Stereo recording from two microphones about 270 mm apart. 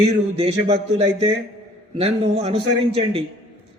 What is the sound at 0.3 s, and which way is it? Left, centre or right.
Speech, right.